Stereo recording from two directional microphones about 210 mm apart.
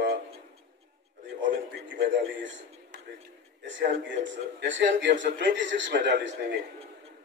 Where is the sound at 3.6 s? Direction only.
60° right (ahead or behind).